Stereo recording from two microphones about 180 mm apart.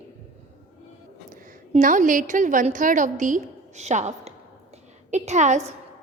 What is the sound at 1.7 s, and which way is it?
A woman's voice, 45° right (ahead or behind).